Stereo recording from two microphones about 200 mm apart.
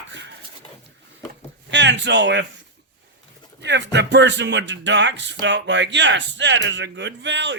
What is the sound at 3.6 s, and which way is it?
Speech, 60° right (ahead or behind).